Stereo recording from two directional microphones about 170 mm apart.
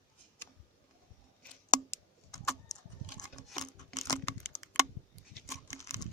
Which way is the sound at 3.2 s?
25° left (ahead or behind).